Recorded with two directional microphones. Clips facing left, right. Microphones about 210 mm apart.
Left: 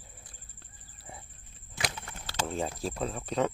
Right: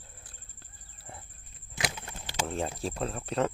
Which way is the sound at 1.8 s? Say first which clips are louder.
Right 1 dB; 5° right (ahead or behind).